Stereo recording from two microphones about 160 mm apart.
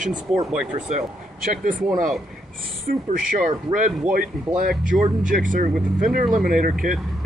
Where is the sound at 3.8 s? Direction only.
5° right (ahead or behind).